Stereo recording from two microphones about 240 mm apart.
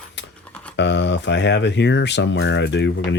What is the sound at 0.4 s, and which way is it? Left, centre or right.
Typing, centre.